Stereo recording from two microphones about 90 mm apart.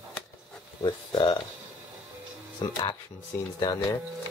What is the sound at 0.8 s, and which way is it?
Speech, 55° left (ahead or behind).